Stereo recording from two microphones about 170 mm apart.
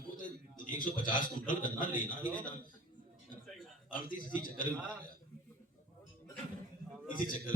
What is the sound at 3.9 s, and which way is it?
Speech, 55° left (ahead or behind).